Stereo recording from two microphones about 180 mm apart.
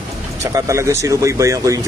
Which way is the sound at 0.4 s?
15° right (ahead or behind).